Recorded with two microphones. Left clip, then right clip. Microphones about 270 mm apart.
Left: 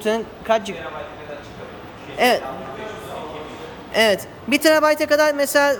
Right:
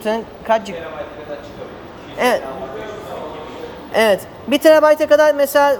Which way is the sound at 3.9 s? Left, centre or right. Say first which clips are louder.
Right 3 dB; centre.